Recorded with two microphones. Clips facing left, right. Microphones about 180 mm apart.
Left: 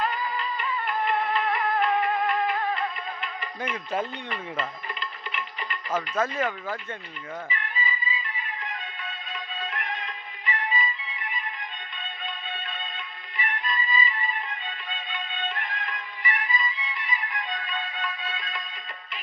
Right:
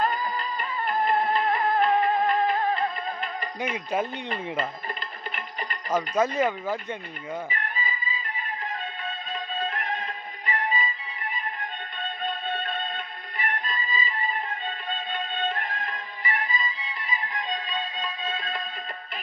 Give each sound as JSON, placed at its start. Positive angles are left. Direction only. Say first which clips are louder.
{"t": 0.0, "sound": "music", "louder": "right 2 dB", "side_deg": -40}
{"t": 4.3, "sound": "music", "louder": "right 3 dB", "side_deg": -45}
{"t": 5.9, "sound": "speech", "louder": "right 3 dB", "side_deg": -15}
{"t": 7.5, "sound": "music", "louder": "even", "side_deg": -45}
{"t": 9.6, "sound": "music", "louder": "right 3 dB", "side_deg": -40}
{"t": 12.2, "sound": "music", "louder": "right 7 dB", "side_deg": -50}